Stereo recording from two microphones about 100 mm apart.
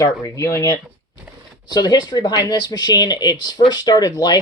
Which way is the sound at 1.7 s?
45° left (ahead or behind).